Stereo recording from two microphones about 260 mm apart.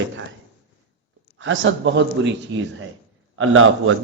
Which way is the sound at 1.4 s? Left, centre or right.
Right.